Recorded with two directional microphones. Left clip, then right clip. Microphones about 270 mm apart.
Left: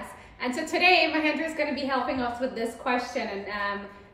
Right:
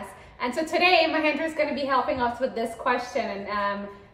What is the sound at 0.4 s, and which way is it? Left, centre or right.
A woman's voice, centre.